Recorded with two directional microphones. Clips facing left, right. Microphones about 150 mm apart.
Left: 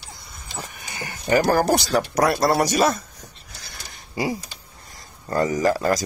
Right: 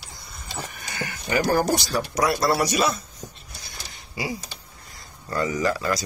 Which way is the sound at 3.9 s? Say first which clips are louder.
Left 5 dB; 45° left (ahead or behind).